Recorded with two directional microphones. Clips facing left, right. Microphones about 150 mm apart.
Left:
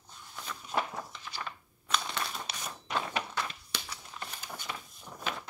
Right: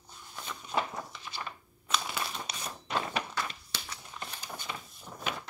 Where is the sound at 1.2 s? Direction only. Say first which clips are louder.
Even; 15° right (ahead or behind).